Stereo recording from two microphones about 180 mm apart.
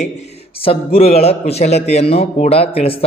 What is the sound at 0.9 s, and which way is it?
A man's voice, 35° left (ahead or behind).